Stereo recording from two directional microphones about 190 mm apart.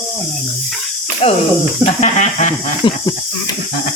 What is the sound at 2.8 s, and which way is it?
Cricket, 25° left (ahead or behind).